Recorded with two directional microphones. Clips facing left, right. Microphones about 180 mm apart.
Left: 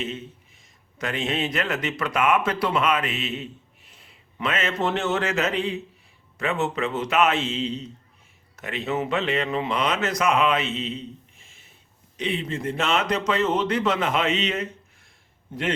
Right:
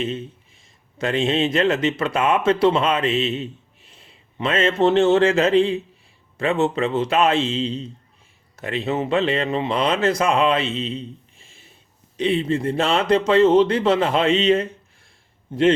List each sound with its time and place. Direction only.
0.9 s speech: 30° right (ahead or behind)